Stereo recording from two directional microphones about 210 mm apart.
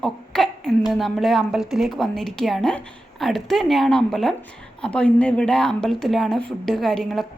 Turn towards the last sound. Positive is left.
turn(degrees=0)  # may be behind; listen again after turning